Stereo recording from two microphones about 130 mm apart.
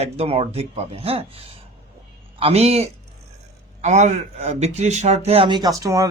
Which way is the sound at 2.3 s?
50° right (ahead or behind).